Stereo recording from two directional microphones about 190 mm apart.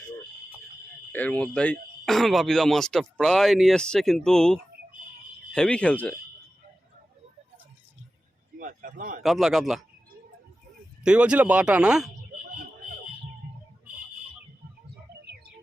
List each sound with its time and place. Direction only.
1.1 s speech: 10° left (ahead or behind)
8.5 s a sound: 45° right (ahead or behind)
9.2 s speech: centre (ahead or behind)
11.0 s speech: 5° right (ahead or behind)